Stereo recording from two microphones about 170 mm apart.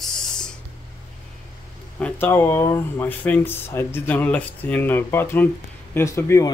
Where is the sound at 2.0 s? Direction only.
10° left (ahead or behind).